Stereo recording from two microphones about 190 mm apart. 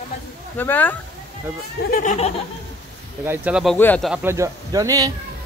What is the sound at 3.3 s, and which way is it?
Speech, 5° right (ahead or behind).